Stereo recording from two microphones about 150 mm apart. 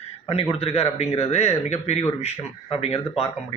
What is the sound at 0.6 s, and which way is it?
A man's voice, 40° left (ahead or behind).